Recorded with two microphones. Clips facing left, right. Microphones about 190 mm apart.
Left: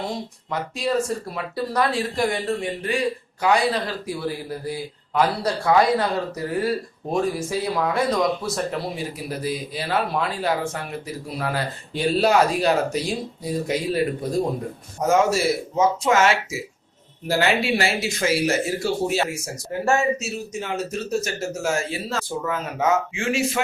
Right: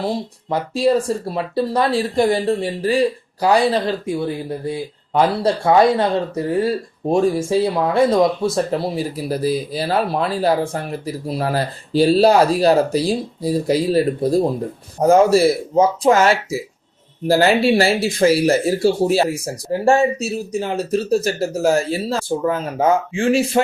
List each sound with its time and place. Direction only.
0.0 s speech: 30° right (ahead or behind)